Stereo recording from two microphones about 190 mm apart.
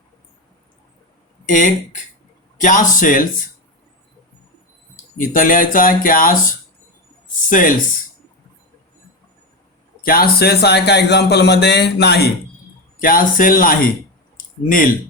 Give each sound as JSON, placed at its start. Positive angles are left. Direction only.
{"t": 1.5, "sound": "speech", "side_deg": 45}
{"t": 5.1, "sound": "speech", "side_deg": 45}
{"t": 10.0, "sound": "a man's voice", "side_deg": 50}
{"t": 13.0, "sound": "speech", "side_deg": 50}
{"t": 14.3, "sound": "a sound", "side_deg": 45}